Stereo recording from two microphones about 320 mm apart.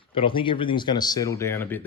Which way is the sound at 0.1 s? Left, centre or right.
Centre.